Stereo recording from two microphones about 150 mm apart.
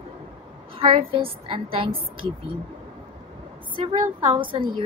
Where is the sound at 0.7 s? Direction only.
35° right (ahead or behind).